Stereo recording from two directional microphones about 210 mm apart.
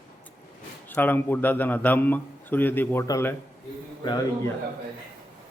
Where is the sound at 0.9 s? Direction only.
10° left (ahead or behind).